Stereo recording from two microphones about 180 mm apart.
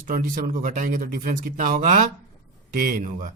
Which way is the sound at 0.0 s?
50° right (ahead or behind).